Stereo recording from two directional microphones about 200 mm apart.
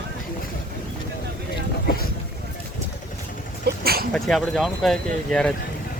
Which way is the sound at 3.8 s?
50° right (ahead or behind).